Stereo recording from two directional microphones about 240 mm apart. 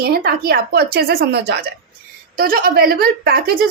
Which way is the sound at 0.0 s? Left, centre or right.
Right.